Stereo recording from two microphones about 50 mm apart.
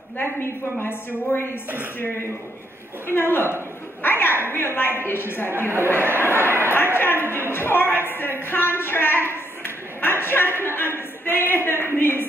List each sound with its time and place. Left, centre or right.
0.7 s a woman's voice: left
3.1 s a woman's voice: left
5.5 s speech: right
6.7 s a woman's voice: left